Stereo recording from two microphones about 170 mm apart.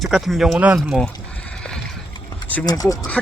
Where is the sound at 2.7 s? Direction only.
20° left (ahead or behind).